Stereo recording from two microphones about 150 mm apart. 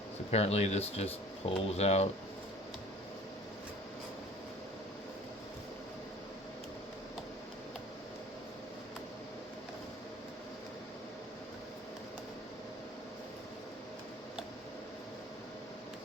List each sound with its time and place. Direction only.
0.3 s speech: 45° left (ahead or behind)